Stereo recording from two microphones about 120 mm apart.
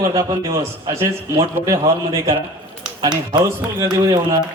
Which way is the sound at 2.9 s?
40° right (ahead or behind).